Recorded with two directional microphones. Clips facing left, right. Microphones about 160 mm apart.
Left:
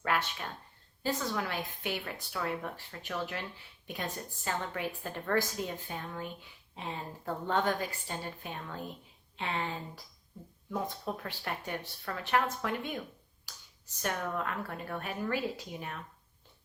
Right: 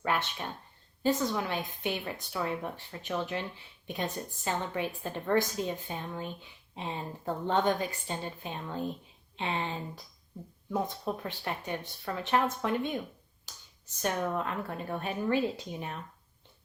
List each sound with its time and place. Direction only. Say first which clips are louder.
0.0 s a woman's voice: right 1 dB; 20° right (ahead or behind)
13.5 s finger snapping: right 1 dB; 25° right (ahead or behind)
14.0 s a woman's voice: right 3 dB; 25° right (ahead or behind)